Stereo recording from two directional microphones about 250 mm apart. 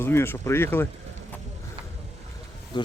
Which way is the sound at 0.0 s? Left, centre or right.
Centre.